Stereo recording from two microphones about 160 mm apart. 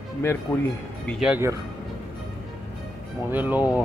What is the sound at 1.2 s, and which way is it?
Speech, 15° right (ahead or behind).